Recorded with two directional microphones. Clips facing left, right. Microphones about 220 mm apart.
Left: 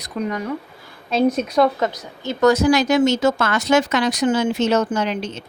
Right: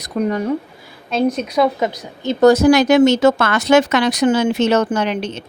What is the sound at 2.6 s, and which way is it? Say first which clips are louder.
Speech: right 5 dB; 60° right (ahead or behind).